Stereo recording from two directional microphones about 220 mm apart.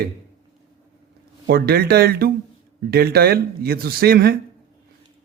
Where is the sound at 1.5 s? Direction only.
45° right (ahead or behind).